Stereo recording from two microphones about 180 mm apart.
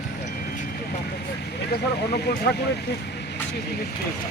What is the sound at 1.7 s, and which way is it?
Speech, 65° left (ahead or behind).